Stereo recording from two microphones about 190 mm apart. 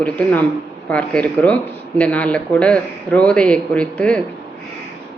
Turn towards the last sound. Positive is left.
turn(degrees=5)  # may be behind; listen again after turning